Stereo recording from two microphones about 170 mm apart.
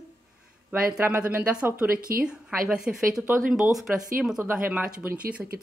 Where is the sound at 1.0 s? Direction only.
10° right (ahead or behind).